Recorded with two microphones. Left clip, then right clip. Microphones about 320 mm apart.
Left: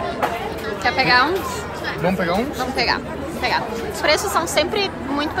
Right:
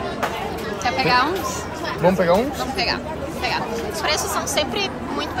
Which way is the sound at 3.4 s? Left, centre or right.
Centre.